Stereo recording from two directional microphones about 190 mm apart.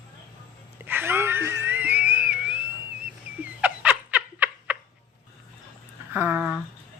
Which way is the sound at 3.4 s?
5° right (ahead or behind).